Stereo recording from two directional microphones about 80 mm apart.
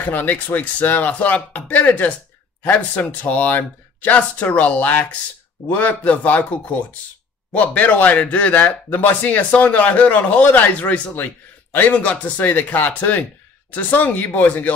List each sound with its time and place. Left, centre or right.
0.0 s speech: left